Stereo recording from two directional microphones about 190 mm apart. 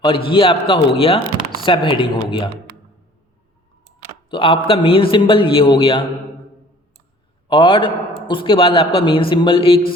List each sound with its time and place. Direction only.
0.0 s a man's voice: 25° left (ahead or behind)
4.3 s a man's voice: 25° left (ahead or behind)
7.4 s a man's voice: 25° left (ahead or behind)